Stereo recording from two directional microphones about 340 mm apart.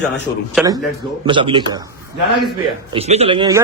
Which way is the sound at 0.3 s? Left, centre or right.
Centre.